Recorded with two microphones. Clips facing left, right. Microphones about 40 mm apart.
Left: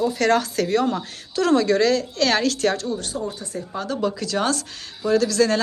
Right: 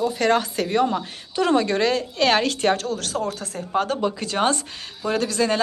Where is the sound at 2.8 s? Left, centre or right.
Right.